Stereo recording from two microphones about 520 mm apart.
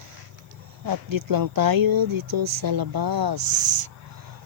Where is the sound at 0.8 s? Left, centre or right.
Right.